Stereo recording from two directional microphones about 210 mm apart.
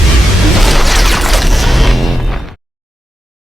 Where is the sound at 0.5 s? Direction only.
Centre (ahead or behind).